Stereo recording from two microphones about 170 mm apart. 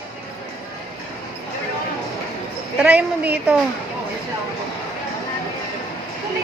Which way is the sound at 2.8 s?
10° right (ahead or behind).